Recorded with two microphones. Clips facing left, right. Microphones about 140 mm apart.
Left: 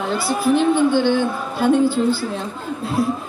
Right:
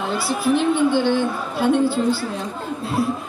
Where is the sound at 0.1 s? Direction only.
Centre (ahead or behind).